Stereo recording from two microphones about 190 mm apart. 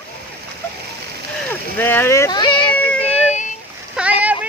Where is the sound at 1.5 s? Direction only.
10° left (ahead or behind).